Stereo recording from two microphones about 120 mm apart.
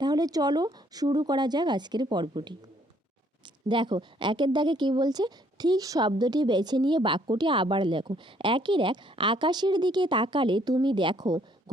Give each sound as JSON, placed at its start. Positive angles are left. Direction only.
{"t": 0.0, "sound": "a woman's voice", "side_deg": -35}
{"t": 3.7, "sound": "a woman's voice", "side_deg": -40}